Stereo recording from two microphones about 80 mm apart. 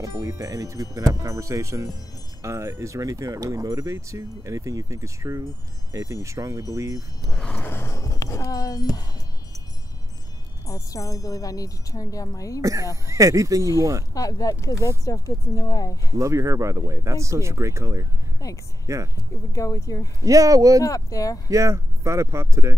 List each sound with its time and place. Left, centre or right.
0.0 s speech: right
7.2 s a sound: centre
7.6 s a sound: left
7.9 s speech: left
10.7 s speech: left
12.9 s speech: right
14.1 s speech: left
16.2 s speech: right
18.4 s speech: left
20.2 s speech: right
20.8 s speech: left
21.5 s speech: right